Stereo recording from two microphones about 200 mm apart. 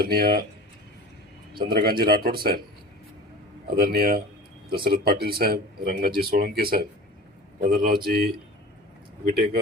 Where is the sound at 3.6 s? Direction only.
50° right (ahead or behind).